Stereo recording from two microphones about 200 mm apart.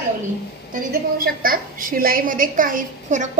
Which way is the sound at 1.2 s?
45° right (ahead or behind).